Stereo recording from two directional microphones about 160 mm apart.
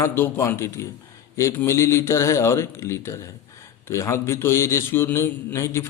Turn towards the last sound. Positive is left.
turn(degrees=15)  # may be behind; listen again after turning